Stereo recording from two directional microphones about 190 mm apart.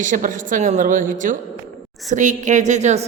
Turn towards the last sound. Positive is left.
turn(degrees=-35)  # may be behind; listen again after turning